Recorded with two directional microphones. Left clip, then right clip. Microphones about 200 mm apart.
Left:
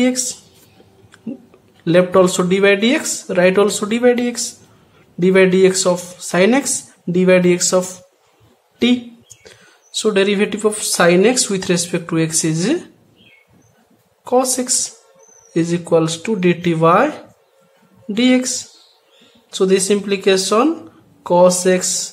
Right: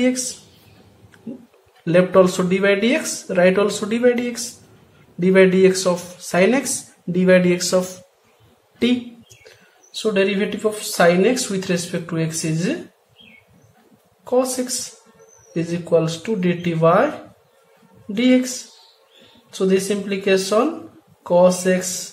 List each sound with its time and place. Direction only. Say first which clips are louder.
1.9 s speech: left 2 dB; 25° left (ahead or behind)
9.9 s speech: left 4 dB; 30° left (ahead or behind)
14.2 s speech: left 3 dB; 30° left (ahead or behind)
18.1 s speech: left 2 dB; 30° left (ahead or behind)
19.5 s speech: left 4 dB; 30° left (ahead or behind)